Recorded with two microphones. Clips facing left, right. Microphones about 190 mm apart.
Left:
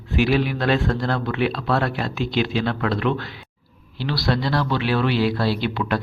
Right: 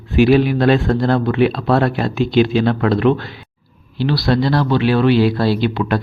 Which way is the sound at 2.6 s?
40° right (ahead or behind).